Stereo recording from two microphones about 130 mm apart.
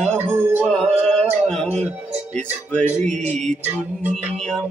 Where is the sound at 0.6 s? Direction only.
5° left (ahead or behind).